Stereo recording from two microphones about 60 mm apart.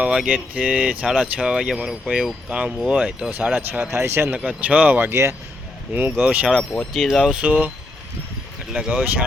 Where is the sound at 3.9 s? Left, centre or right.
Right.